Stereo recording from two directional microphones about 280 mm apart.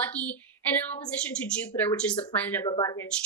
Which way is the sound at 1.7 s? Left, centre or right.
Centre.